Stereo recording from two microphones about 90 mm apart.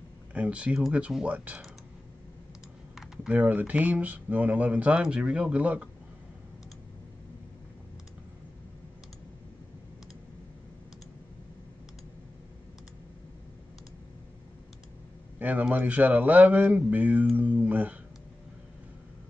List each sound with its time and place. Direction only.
0.3 s speech: 15° right (ahead or behind)
3.3 s speech: 20° right (ahead or behind)
15.3 s speech: 20° right (ahead or behind)